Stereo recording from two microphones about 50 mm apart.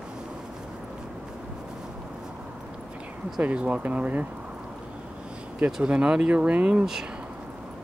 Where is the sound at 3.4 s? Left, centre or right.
Right.